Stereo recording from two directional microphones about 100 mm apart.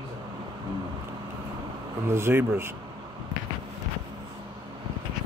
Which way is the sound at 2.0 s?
25° right (ahead or behind).